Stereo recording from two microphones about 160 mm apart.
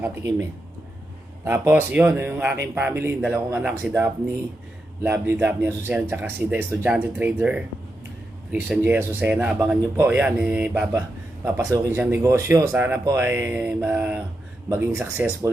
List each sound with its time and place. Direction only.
0.0 s speech: 15° right (ahead or behind)
1.5 s speech: 10° right (ahead or behind)
5.0 s speech: 15° right (ahead or behind)
8.6 s speech: 10° right (ahead or behind)